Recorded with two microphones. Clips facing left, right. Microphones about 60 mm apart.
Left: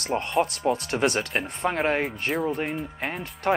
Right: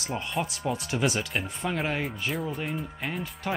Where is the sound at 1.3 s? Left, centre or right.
Centre.